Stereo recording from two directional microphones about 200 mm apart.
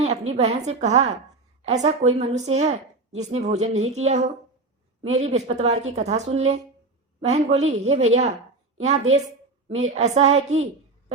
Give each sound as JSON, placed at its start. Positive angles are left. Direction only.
{"t": 0.0, "sound": "a woman's voice", "side_deg": -35}